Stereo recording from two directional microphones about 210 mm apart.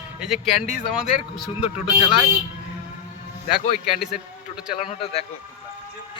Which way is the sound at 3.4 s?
40° left (ahead or behind).